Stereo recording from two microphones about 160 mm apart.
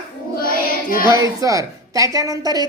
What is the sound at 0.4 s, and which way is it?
Music, 65° left (ahead or behind).